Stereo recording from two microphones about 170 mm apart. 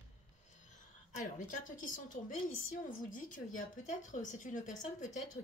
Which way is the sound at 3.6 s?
45° left (ahead or behind).